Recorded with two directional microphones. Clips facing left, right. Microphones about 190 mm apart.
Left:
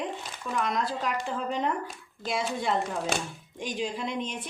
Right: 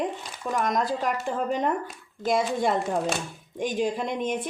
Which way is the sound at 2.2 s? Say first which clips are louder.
Right 6 dB; 50° right (ahead or behind).